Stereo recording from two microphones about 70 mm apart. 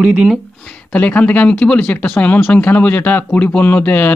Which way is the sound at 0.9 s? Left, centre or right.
Left.